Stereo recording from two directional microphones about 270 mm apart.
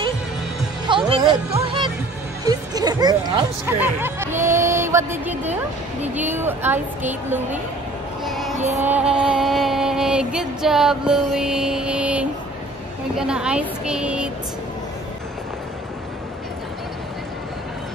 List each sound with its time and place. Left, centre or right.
0.8 s music: centre
8.3 s child singing: centre
8.5 s music: right
8.8 s music: centre